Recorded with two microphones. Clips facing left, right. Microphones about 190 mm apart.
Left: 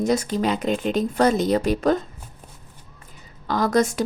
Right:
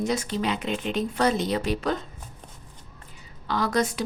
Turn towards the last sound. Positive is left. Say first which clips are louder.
# left 5 dB
turn(degrees=45)  # may be behind; listen again after turning